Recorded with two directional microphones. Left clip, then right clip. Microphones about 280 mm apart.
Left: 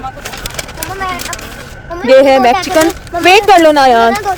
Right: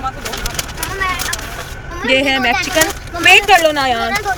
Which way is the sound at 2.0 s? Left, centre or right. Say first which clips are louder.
Left 8 dB; centre.